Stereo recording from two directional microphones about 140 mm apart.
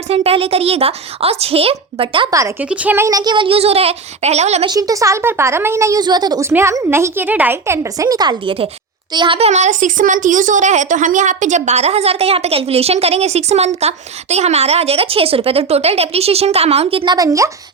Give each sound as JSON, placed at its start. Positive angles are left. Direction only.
{"t": 0.1, "sound": "a woman's voice", "side_deg": -45}
{"t": 2.6, "sound": "speech", "side_deg": -10}
{"t": 4.6, "sound": "a woman's voice", "side_deg": -25}
{"t": 9.5, "sound": "a woman's voice", "side_deg": -60}
{"t": 17.2, "sound": "a woman's voice", "side_deg": -25}